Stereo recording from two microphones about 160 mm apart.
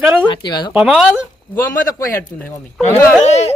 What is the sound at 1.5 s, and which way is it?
Speech, 20° left (ahead or behind).